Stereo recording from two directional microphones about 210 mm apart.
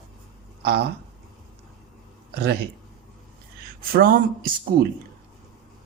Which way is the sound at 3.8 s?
45° right (ahead or behind).